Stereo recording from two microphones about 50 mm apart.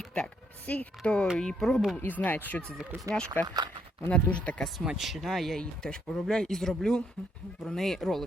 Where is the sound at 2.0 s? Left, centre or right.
Left.